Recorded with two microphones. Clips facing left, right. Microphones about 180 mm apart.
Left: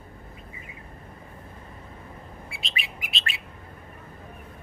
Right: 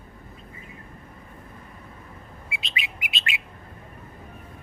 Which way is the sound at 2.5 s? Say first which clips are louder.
Right 3 dB; 20° right (ahead or behind).